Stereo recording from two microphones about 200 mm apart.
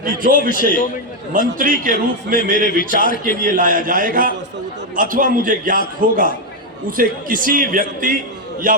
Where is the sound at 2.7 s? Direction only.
45° left (ahead or behind).